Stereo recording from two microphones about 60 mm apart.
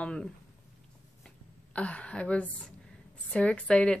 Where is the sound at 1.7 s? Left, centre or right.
Left.